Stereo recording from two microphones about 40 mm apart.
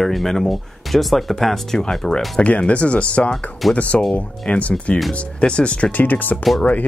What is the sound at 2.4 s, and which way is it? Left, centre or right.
Speech, left.